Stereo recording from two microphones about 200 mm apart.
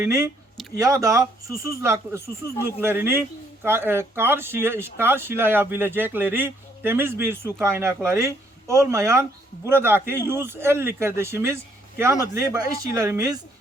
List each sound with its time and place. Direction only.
0.0 s speech: 15° right (ahead or behind)